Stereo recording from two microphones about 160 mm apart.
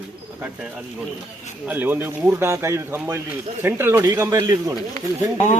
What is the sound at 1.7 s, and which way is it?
Speech, 10° right (ahead or behind).